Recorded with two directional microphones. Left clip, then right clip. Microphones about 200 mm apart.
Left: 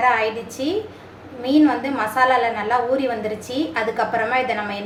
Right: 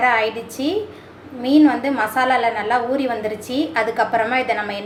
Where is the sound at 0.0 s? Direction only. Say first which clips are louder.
Right 1 dB; 15° right (ahead or behind).